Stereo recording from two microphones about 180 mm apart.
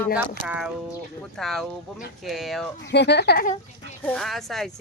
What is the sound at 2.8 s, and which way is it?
Speech, 70° left (ahead or behind).